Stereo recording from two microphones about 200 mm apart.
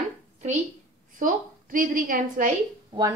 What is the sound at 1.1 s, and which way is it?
A woman's voice, 40° right (ahead or behind).